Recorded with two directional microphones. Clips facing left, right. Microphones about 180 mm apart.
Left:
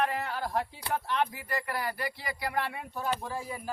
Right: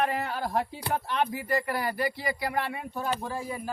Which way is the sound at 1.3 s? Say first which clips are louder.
Right 7 dB; 30° right (ahead or behind).